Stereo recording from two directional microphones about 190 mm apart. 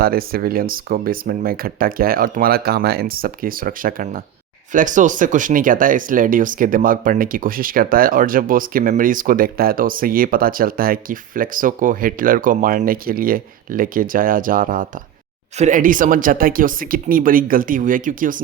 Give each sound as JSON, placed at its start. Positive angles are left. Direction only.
{"t": 0.0, "sound": "speech", "side_deg": -50}